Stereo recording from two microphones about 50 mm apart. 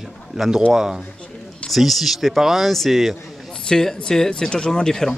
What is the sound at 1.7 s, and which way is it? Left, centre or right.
Speech, centre.